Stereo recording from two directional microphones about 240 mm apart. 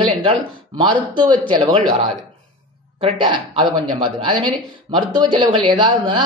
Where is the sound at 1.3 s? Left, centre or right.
Centre.